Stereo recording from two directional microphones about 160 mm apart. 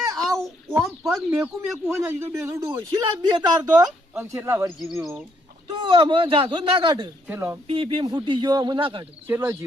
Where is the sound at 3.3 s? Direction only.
25° right (ahead or behind).